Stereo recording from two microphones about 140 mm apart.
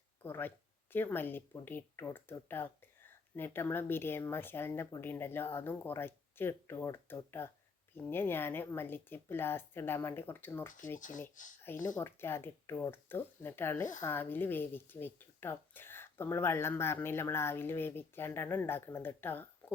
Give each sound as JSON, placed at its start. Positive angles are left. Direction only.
{"t": 0.2, "sound": "speech", "side_deg": 15}
{"t": 11.9, "sound": "speech", "side_deg": 15}